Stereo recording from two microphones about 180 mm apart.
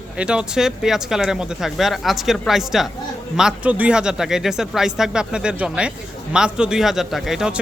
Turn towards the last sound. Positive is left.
turn(degrees=-5)  # may be behind; listen again after turning